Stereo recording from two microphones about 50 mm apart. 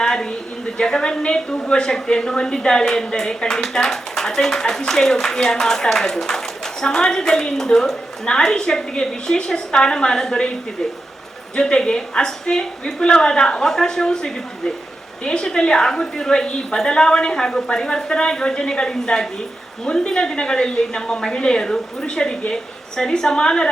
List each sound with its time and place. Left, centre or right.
0.0 s a sound: centre
0.8 s a woman's voice: centre
11.5 s a woman's voice: centre